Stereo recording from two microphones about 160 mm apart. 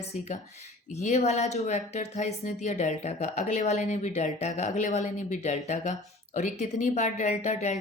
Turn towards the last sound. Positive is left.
turn(degrees=45)  # may be behind; listen again after turning